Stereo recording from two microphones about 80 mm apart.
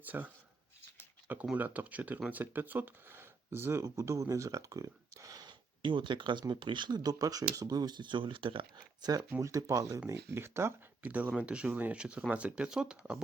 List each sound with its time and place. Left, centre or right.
0.0 s speech: right
1.5 s speech: right
5.5 s a sound: right
6.5 s speech: right
9.4 s speech: right
10.1 s speech: right
11.0 s speech: centre